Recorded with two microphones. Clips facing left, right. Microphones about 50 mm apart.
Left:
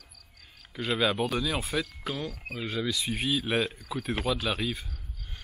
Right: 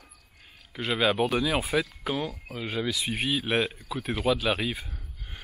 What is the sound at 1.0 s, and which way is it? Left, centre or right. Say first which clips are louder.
Speech: right 4 dB; centre.